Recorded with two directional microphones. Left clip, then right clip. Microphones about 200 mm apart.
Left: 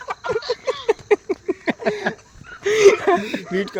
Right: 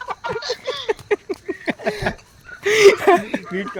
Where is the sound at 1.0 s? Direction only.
40° left (ahead or behind).